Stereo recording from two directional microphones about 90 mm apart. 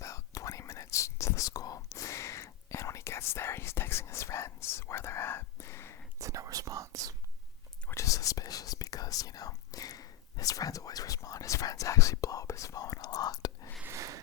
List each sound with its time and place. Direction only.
0.0 s whispering: 35° left (ahead or behind)
6.1 s whispering: 35° right (ahead or behind)
7.9 s whispering: 35° left (ahead or behind)
13.8 s a sound: 35° right (ahead or behind)